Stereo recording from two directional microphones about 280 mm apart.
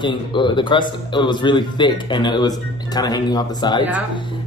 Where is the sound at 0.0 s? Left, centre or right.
Centre.